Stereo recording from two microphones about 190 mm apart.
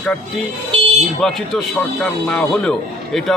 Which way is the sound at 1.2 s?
Centre (ahead or behind).